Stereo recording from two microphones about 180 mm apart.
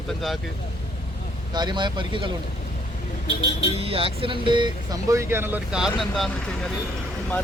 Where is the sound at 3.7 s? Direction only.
30° right (ahead or behind); by 6.3 s centre (ahead or behind).